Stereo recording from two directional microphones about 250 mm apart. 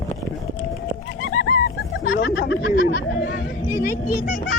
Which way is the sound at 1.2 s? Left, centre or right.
Left.